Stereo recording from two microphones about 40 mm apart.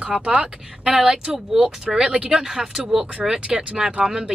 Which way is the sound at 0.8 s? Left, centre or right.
Centre.